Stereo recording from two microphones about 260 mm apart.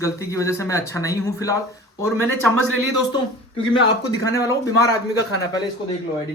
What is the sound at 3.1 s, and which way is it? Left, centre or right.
Speech, centre.